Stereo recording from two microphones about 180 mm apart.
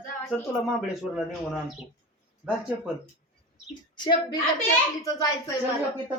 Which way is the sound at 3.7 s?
25° left (ahead or behind).